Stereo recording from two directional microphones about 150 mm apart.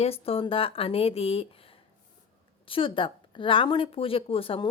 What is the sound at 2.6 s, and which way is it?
Speech, 35° left (ahead or behind).